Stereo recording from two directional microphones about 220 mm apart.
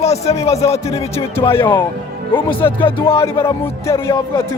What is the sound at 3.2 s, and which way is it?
A man's voice, 15° left (ahead or behind).